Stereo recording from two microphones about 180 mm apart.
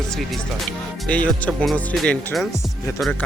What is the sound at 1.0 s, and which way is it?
Speech, 5° left (ahead or behind).